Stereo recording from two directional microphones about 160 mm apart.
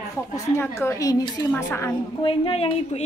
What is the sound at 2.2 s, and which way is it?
Speech, 35° left (ahead or behind).